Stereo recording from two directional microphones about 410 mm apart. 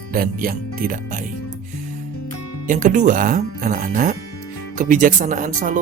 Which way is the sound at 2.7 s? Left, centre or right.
Centre.